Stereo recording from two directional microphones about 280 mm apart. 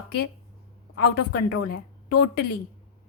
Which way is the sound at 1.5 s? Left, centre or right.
Left.